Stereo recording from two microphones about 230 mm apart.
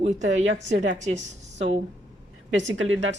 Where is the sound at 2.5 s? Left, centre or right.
Right.